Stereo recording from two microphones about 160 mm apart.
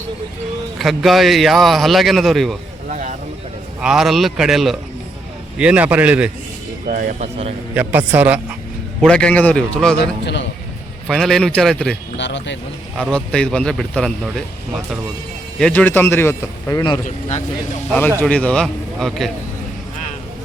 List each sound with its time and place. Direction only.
0.8 s a man's voice: centre (ahead or behind)
2.9 s a sound: 55° right (ahead or behind)
3.8 s a man's voice: 5° right (ahead or behind)
6.8 s speech: 55° right (ahead or behind)
7.8 s a man's voice: 10° right (ahead or behind)
9.0 s a man's voice: 5° left (ahead or behind)
10.0 s a man's voice: 90° left
11.1 s a man's voice: centre (ahead or behind)
12.1 s speech: 90° left
13.0 s a man's voice: 5° left (ahead or behind)
15.5 s a man's voice: 10° left (ahead or behind)
18.2 s a man's voice: 10° left (ahead or behind)